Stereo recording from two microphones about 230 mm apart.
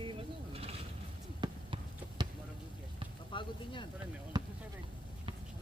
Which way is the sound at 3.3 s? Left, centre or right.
Left.